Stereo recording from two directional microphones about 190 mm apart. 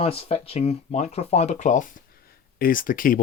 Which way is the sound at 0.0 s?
30° left (ahead or behind).